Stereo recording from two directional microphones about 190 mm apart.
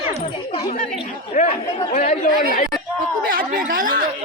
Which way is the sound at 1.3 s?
40° left (ahead or behind).